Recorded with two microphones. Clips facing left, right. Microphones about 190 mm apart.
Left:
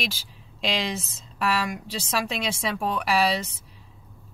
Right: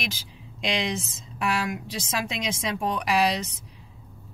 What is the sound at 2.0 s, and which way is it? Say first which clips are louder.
Speech: left 3 dB; 15° right (ahead or behind).